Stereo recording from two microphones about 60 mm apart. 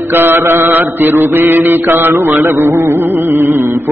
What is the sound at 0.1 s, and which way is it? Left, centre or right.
Mantra, right.